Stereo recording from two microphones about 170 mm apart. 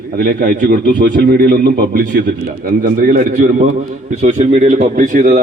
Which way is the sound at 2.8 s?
50° right (ahead or behind).